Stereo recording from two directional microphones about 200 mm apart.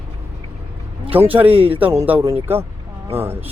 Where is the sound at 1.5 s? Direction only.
30° right (ahead or behind).